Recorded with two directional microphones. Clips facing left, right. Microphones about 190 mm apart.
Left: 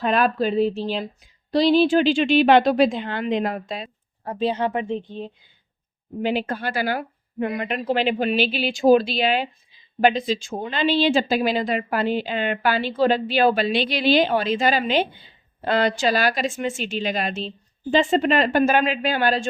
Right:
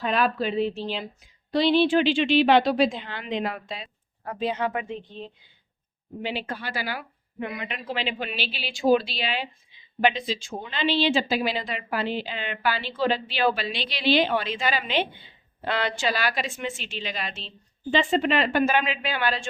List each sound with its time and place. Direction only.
0.0 s a woman's voice: 50° left (ahead or behind)
4.3 s speech: 30° left (ahead or behind)
6.2 s a woman's voice: 50° left (ahead or behind)